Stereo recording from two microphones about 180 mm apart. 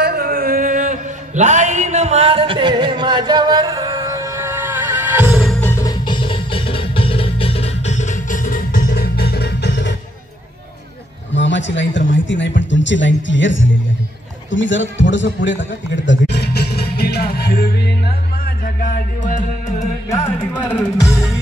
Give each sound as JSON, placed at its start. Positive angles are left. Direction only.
{"t": 0.0, "sound": "mantra", "side_deg": -60}
{"t": 5.4, "sound": "music", "side_deg": 5}
{"t": 6.0, "sound": "music", "side_deg": 30}
{"t": 11.3, "sound": "a sound", "side_deg": 90}
{"t": 12.1, "sound": "speech", "side_deg": 90}
{"t": 14.5, "sound": "a sound", "side_deg": 90}
{"t": 20.6, "sound": "music", "side_deg": 5}